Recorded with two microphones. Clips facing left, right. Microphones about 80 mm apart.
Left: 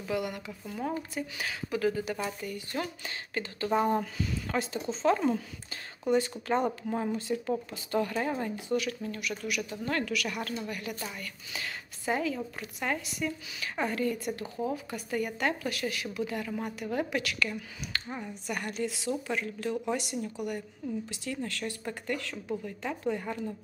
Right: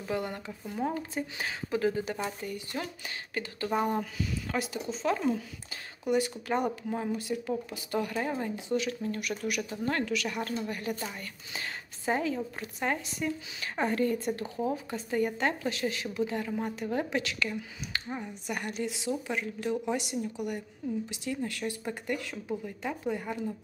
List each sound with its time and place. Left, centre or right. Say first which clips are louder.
0.1 s a woman's voice: left 1 dB; right
0.5 s a woman's voice: right 2 dB; centre
3.3 s speech: left 2 dB; centre
3.9 s speech: left 2 dB; centre
6.1 s speech: left 1 dB; centre
8.1 s speech: left 1 dB; centre
8.5 s a woman's voice: even; right